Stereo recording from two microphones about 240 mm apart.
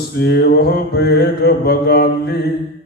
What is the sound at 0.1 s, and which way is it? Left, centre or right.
Mantra, left.